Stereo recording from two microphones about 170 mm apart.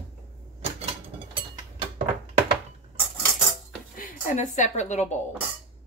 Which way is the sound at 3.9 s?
55° left (ahead or behind).